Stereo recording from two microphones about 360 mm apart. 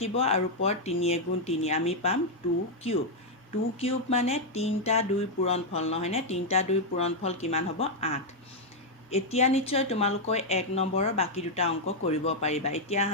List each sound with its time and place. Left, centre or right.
0.0 s speech: centre
3.8 s speech: centre